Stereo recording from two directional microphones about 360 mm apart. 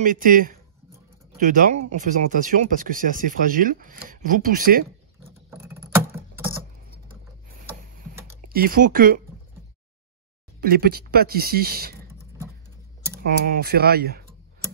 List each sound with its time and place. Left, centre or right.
0.0 s speech: right
5.5 s a sound: centre
8.5 s speech: right
10.6 s speech: right
12.1 s a sound: centre
13.5 s speech: right